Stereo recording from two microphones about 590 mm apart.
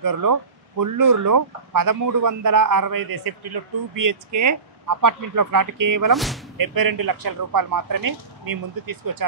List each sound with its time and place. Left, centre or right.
0.0 s speech: right
6.1 s speech: centre
6.6 s speech: right